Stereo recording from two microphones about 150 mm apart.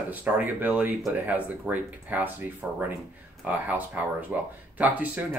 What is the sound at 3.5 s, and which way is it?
Speech, 10° right (ahead or behind).